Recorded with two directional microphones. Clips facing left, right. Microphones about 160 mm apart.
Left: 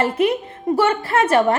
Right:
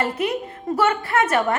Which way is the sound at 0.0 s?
25° left (ahead or behind).